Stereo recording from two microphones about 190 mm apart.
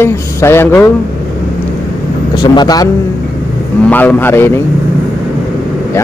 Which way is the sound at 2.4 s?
20° left (ahead or behind).